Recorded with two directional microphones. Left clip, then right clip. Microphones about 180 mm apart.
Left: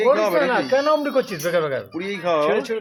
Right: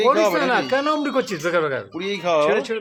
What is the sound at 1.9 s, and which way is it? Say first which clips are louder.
Speech: right 1 dB; centre (ahead or behind).